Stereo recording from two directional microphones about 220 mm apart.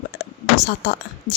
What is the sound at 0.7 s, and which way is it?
Speech, 45° left (ahead or behind).